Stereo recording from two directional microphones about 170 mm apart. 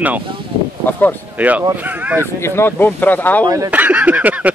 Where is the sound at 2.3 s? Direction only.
15° left (ahead or behind).